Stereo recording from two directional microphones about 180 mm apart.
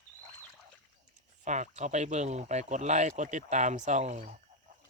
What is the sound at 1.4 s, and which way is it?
Speech, 40° right (ahead or behind).